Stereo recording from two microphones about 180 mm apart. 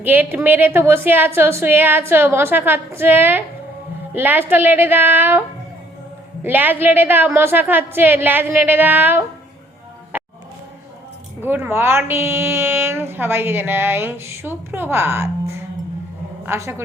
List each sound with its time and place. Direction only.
0.0 s a woman's voice: 10° right (ahead or behind)
6.4 s a woman's voice: 10° right (ahead or behind)
10.1 s music: 10° right (ahead or behind)
11.4 s a woman's voice: 10° right (ahead or behind)